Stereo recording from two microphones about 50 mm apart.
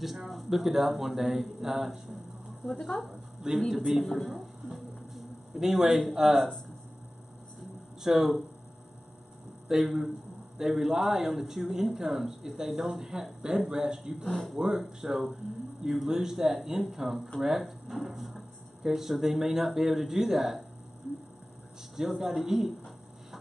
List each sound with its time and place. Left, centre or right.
0.0 s a man's voice: centre
2.7 s a man's voice: centre
4.6 s a sound: centre
6.1 s speech: centre
8.0 s speech: centre
9.7 s speech: centre
14.3 s a man's voice: centre
14.6 s speech: centre
21.9 s a sound: centre